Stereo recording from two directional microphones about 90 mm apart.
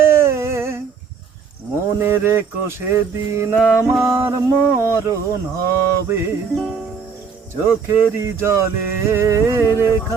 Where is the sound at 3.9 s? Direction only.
30° right (ahead or behind).